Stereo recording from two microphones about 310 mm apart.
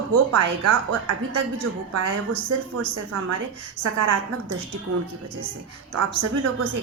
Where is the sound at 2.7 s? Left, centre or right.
Right.